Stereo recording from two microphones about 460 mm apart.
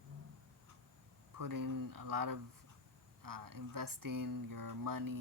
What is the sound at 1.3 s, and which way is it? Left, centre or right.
Speech, right.